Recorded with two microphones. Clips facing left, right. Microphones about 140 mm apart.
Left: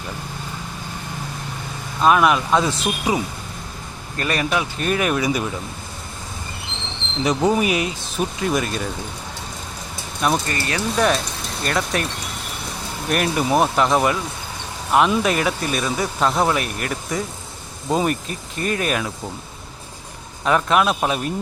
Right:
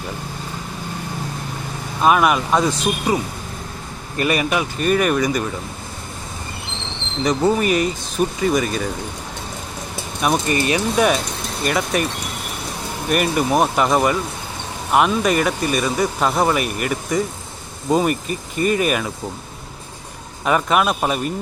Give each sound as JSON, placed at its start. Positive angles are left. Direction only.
{"t": 2.0, "sound": "speech", "side_deg": -5}
{"t": 4.2, "sound": "speech", "side_deg": -10}
{"t": 7.3, "sound": "speech", "side_deg": 5}
{"t": 10.2, "sound": "speech", "side_deg": -5}
{"t": 10.4, "sound": "speech", "side_deg": -20}
{"t": 13.1, "sound": "speech", "side_deg": -5}
{"t": 20.4, "sound": "speech", "side_deg": -5}